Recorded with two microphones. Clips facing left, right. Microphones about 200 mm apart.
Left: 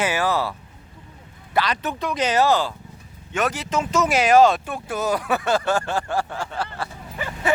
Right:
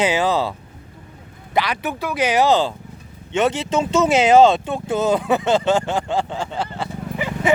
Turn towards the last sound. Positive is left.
turn(degrees=-15)  # may be behind; listen again after turning